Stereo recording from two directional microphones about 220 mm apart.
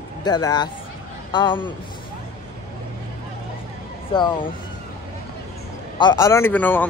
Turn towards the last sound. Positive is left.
turn(degrees=10)  # may be behind; listen again after turning